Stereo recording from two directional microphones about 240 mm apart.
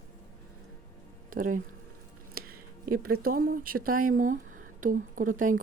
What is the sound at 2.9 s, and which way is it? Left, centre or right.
Speech, right.